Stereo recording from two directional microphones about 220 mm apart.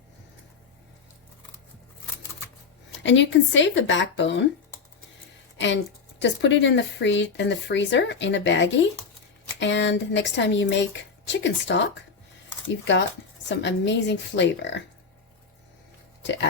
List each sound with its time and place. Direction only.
3.0 s speech: 55° left (ahead or behind)
5.5 s a woman's voice: 55° left (ahead or behind)
13.5 s a woman's voice: 55° left (ahead or behind)
16.2 s speech: 55° left (ahead or behind)